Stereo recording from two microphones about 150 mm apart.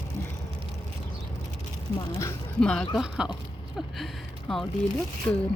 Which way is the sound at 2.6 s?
5° left (ahead or behind).